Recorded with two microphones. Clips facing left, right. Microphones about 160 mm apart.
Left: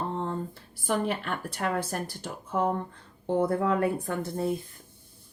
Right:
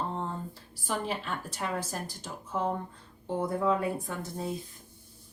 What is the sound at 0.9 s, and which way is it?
Speech, 60° left (ahead or behind).